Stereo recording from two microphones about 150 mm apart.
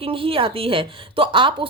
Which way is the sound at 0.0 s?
35° right (ahead or behind).